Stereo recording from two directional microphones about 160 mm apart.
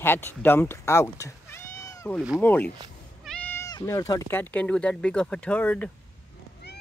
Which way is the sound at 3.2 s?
5° left (ahead or behind).